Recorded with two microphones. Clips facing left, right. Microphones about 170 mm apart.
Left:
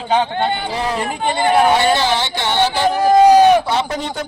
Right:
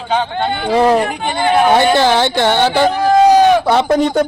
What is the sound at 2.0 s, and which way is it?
Speech, 55° right (ahead or behind).